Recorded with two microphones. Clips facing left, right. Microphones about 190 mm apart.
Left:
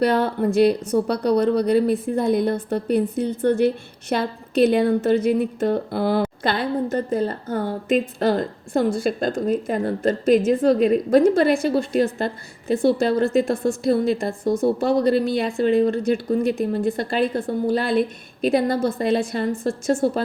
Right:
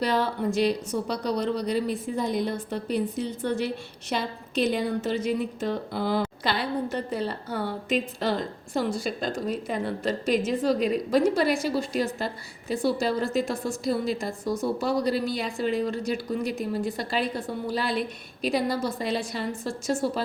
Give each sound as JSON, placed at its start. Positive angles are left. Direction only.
{"t": 0.0, "sound": "a woman's voice", "side_deg": 60}